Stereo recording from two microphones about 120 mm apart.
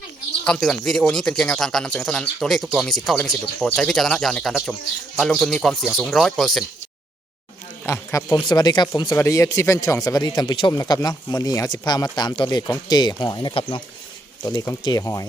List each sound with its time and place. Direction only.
0.4 s speech: 5° left (ahead or behind)
7.9 s speech: 25° left (ahead or behind)
8.4 s speech: 35° left (ahead or behind)
9.1 s speech: 25° left (ahead or behind); by 13.8 s 45° left (ahead or behind)
14.4 s speech: 25° left (ahead or behind)